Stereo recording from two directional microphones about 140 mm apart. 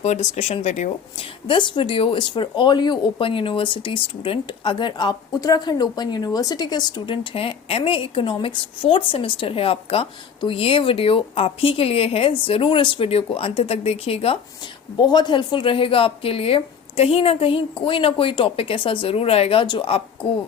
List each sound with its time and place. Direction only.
0.0 s speech: 55° left (ahead or behind)
1.5 s speech: 35° left (ahead or behind)
14.9 s speech: 30° left (ahead or behind)